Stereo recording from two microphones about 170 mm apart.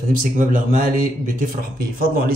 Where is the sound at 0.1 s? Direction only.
50° right (ahead or behind).